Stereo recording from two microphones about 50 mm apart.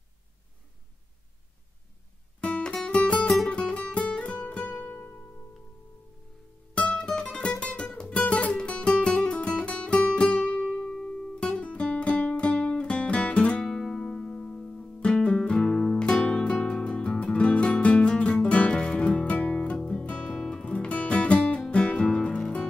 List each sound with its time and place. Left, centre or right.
2.4 s music: centre
7.1 s music: centre
13.6 s music: centre
20.3 s music: centre
20.6 s music: left